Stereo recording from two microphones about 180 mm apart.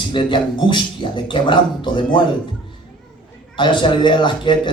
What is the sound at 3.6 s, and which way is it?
A man's voice, 25° left (ahead or behind).